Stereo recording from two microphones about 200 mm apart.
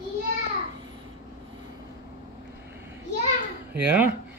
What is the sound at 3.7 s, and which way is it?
Speech, 10° right (ahead or behind).